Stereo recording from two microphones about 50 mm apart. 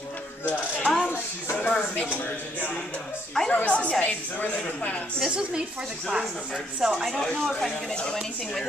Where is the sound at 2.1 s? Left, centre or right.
Left.